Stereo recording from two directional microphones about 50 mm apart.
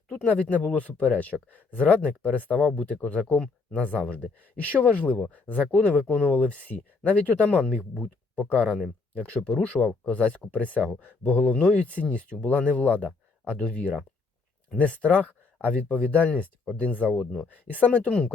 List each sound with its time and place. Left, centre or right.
0.3 s speech: left